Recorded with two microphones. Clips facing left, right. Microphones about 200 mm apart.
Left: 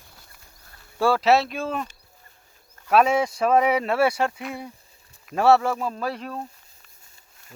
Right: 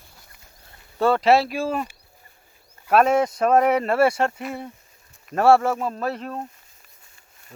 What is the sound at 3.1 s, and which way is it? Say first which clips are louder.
Speech: right 2 dB; 10° left (ahead or behind).